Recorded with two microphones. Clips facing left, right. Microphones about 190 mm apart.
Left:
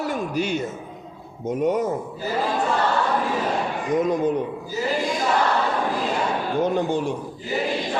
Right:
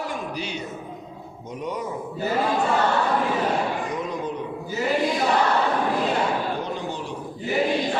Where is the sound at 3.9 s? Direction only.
45° left (ahead or behind).